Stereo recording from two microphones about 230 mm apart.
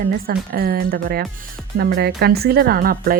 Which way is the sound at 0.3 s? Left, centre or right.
Right.